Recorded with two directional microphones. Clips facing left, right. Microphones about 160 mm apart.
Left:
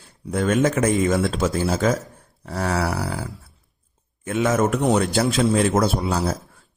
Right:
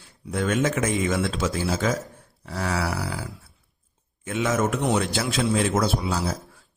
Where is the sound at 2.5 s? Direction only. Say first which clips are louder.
Left 4 dB; 55° left (ahead or behind).